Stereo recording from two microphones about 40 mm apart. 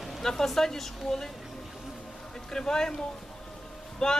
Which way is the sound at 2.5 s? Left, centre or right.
Centre.